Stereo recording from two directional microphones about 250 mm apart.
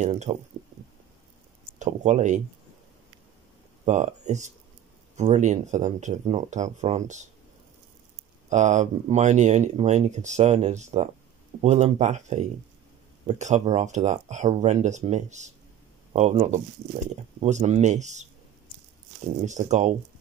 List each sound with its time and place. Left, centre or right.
0.0 s speech: right
1.8 s speech: right
3.8 s speech: right
8.5 s speech: right
19.4 s speech: right